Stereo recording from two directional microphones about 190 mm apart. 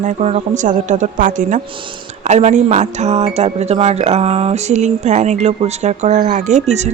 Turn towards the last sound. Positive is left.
turn(degrees=-35)  # may be behind; listen again after turning